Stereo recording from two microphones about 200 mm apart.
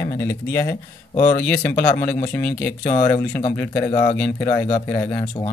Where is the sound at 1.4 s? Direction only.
10° left (ahead or behind).